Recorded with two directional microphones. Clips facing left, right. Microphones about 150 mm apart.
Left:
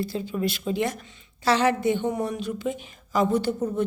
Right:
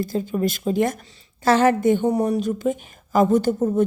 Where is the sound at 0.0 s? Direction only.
45° right (ahead or behind).